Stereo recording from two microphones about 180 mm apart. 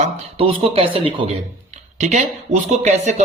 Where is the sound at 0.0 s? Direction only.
35° right (ahead or behind).